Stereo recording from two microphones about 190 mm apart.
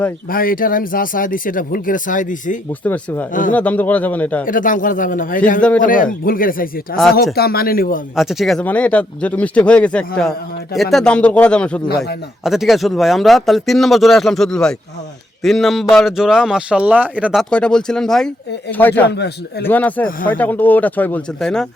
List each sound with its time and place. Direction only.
0.3 s speech: 50° left (ahead or behind)
2.8 s speech: 10° left (ahead or behind)
4.4 s speech: 45° left (ahead or behind)
8.1 s speech: centre (ahead or behind)
17.5 s speech: 5° left (ahead or behind)
19.0 s a man's voice: 60° left (ahead or behind)
19.6 s speech: 10° left (ahead or behind)